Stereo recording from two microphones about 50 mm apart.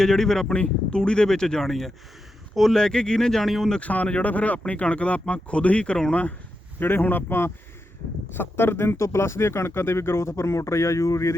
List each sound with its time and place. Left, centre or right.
0.0 s speech: centre
3.8 s speech: left
6.7 s speech: left